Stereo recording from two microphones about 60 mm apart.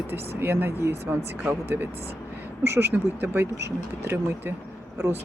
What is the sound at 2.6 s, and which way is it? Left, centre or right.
Speech, right.